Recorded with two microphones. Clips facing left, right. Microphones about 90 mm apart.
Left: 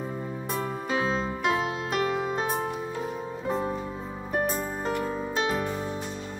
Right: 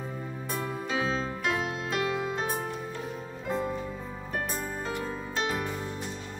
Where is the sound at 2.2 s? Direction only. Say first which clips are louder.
Left 3 dB; 45° left (ahead or behind).